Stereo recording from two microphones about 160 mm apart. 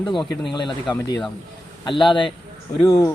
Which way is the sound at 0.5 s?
30° left (ahead or behind).